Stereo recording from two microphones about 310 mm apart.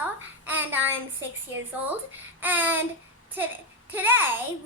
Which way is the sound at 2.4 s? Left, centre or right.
Centre.